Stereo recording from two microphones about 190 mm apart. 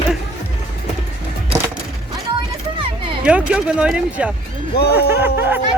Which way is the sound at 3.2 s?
5° right (ahead or behind).